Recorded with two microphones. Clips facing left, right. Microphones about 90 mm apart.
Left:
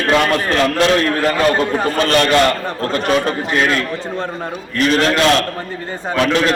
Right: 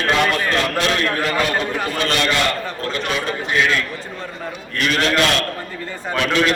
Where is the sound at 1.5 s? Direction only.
35° left (ahead or behind).